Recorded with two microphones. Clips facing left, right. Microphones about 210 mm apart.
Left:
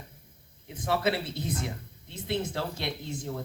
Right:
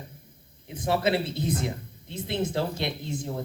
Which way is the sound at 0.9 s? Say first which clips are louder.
Right 3 dB; 25° right (ahead or behind).